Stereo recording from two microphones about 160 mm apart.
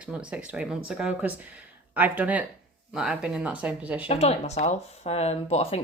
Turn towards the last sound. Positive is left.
turn(degrees=40)  # may be behind; listen again after turning